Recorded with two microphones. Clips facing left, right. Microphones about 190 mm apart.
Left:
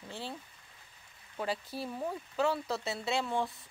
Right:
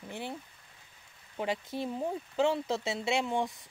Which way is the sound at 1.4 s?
20° right (ahead or behind).